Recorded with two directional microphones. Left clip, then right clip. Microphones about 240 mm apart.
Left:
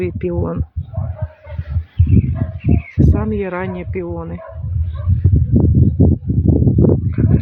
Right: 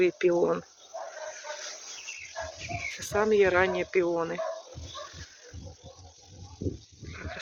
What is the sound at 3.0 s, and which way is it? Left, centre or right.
Speech, centre.